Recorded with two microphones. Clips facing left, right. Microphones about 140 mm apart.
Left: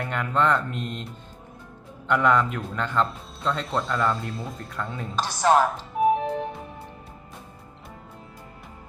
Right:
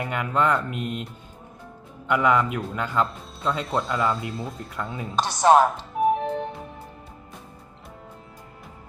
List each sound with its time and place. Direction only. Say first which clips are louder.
0.0 s speech: even; 5° right (ahead or behind)
2.0 s a man's voice: even; 5° right (ahead or behind)
5.1 s speech: right 3 dB; 20° right (ahead or behind)
6.0 s music: even; centre (ahead or behind)